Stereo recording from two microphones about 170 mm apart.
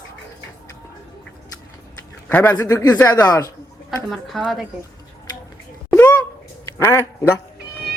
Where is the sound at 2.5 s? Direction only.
20° left (ahead or behind).